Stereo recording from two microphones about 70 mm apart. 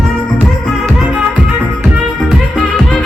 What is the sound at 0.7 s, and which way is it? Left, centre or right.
Music, centre.